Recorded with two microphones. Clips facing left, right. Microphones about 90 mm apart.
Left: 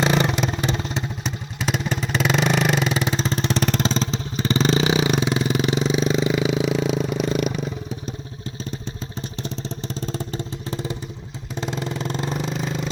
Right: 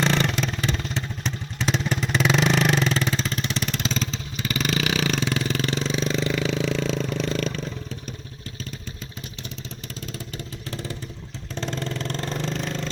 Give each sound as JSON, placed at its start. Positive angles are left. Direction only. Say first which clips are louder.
{"t": 0.0, "sound": "motorcycle", "louder": "left 3 dB", "side_deg": 10}
{"t": 3.9, "sound": "vehicle", "louder": "left 5 dB", "side_deg": 30}
{"t": 9.4, "sound": "vehicle", "louder": "left 10 dB", "side_deg": 35}
{"t": 10.7, "sound": "motorcycle", "louder": "left 4 dB", "side_deg": 20}
{"t": 11.5, "sound": "vehicle", "louder": "left 2 dB", "side_deg": 10}